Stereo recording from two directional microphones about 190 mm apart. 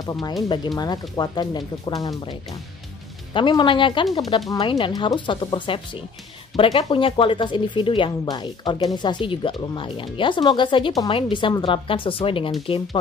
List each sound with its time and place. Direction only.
0.0 s speech: 20° left (ahead or behind)
3.3 s speech: 25° left (ahead or behind)